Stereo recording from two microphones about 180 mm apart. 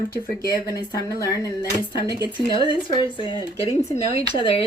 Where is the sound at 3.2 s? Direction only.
25° left (ahead or behind).